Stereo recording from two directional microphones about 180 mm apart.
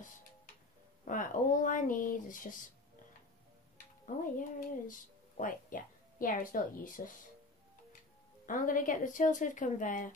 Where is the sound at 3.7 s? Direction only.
45° left (ahead or behind).